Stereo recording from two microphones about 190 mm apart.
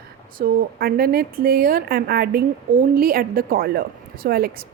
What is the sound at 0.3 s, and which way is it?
A woman's voice, 50° right (ahead or behind).